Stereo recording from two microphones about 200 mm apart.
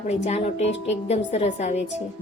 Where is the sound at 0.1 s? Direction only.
30° left (ahead or behind).